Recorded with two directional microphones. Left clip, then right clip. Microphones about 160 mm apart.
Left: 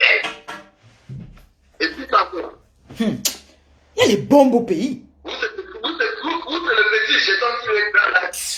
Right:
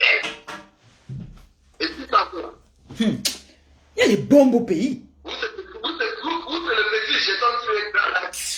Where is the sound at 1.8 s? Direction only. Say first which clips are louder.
Left 3 dB; 30° left (ahead or behind).